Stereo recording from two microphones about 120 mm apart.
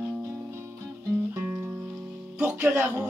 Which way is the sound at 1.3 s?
20° right (ahead or behind).